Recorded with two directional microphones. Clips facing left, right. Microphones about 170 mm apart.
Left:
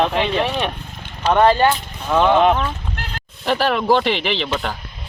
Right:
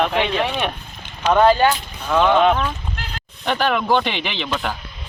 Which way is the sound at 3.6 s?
35° left (ahead or behind).